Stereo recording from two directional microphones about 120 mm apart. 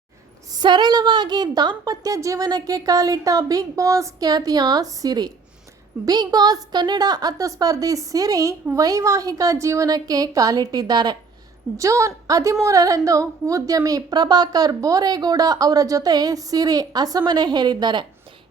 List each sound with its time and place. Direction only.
0.5 s a woman's voice: 40° right (ahead or behind)